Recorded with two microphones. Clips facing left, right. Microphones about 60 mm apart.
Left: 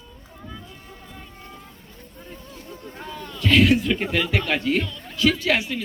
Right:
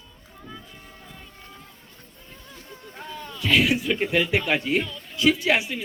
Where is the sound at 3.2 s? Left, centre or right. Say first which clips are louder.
Left 4 dB; centre.